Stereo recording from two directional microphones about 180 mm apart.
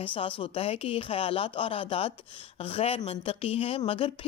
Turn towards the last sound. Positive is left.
turn(degrees=30)  # may be behind; listen again after turning